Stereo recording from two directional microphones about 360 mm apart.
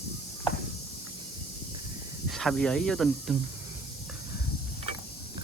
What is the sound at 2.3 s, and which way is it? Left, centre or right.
Speech, centre.